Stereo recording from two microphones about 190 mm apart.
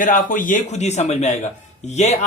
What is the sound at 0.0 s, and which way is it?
A man's voice, 45° left (ahead or behind).